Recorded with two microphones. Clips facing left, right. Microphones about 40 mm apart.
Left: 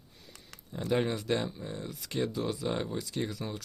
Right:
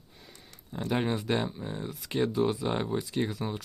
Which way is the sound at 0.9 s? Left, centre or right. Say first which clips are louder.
Even; centre.